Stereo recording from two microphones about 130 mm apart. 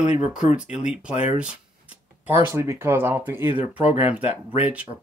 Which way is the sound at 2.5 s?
20° right (ahead or behind).